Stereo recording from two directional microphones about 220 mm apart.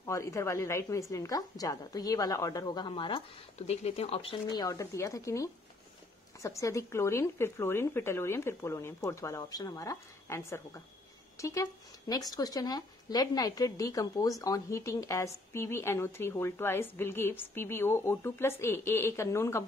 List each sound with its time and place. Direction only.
0.0 s speech: 15° left (ahead or behind)